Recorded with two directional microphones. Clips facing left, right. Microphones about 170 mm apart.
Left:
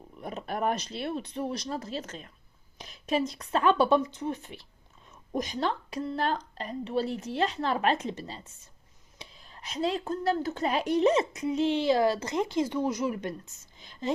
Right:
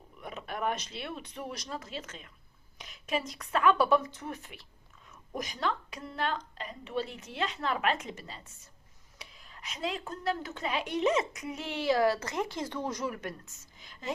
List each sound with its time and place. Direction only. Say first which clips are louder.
0.2 s speech: left 4 dB; 40° left (ahead or behind); by 13.1 s 10° left (ahead or behind)
13.1 s speech: left 5 dB; 20° left (ahead or behind)